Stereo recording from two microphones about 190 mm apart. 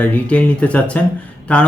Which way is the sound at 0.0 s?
5° left (ahead or behind).